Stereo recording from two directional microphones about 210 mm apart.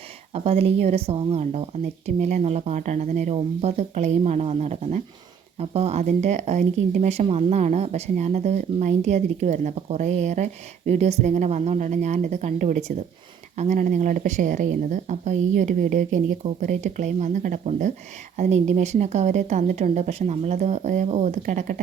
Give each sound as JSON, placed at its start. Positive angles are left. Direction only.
{"t": 0.3, "sound": "a woman's voice", "side_deg": -30}